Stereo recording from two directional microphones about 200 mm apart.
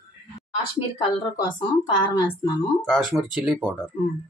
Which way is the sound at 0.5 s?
25° left (ahead or behind).